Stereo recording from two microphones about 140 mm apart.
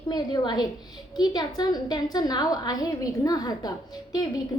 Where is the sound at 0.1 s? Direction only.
30° left (ahead or behind).